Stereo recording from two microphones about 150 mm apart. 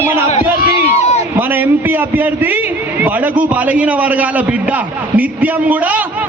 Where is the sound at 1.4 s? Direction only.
15° right (ahead or behind).